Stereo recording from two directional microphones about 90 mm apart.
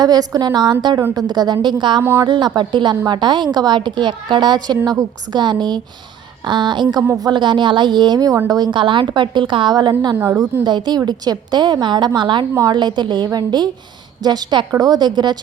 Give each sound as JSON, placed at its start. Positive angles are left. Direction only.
{"t": 0.0, "sound": "a woman's voice", "side_deg": -45}